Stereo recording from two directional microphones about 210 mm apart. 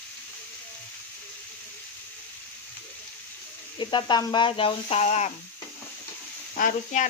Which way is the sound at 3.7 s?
20° left (ahead or behind).